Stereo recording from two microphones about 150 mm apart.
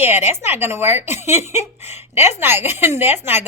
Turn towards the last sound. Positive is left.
turn(degrees=-15)  # may be behind; listen again after turning